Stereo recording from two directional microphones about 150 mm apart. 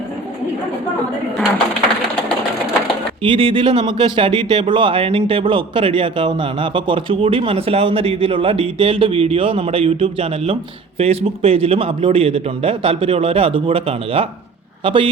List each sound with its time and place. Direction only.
3.2 s speech: 35° right (ahead or behind)